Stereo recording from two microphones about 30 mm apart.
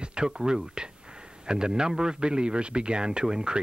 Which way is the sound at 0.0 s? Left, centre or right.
Right.